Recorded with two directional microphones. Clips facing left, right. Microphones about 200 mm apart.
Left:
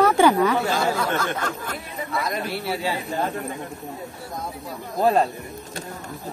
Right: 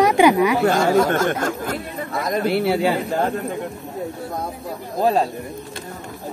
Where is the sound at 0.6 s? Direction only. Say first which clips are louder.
Right 7 dB; 75° right (ahead or behind).